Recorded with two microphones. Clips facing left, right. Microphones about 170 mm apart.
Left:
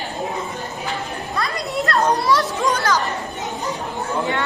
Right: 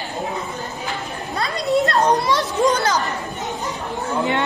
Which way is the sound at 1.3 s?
20° right (ahead or behind).